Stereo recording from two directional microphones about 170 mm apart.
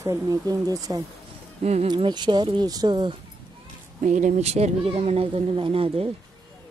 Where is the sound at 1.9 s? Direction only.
25° right (ahead or behind).